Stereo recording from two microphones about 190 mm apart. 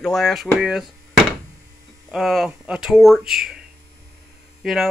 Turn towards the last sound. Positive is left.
turn(degrees=0)  # may be behind; listen again after turning